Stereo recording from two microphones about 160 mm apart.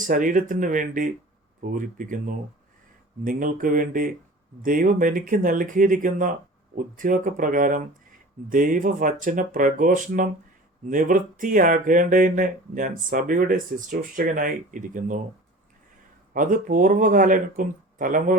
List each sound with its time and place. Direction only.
0.0 s speech: 55° right (ahead or behind)
16.3 s speech: 55° right (ahead or behind)